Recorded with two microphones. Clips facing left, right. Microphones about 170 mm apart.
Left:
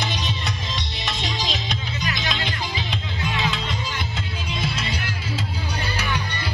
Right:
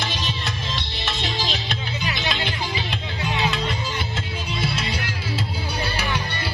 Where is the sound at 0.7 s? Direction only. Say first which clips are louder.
Even; centre (ahead or behind).